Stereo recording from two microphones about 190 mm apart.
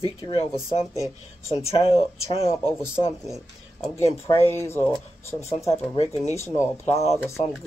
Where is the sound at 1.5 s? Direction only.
35° left (ahead or behind).